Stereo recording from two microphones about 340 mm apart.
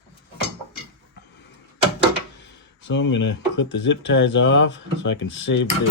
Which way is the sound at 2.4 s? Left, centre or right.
Left.